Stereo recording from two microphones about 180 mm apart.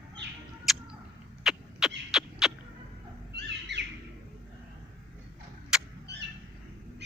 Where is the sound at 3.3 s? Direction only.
75° right (ahead or behind).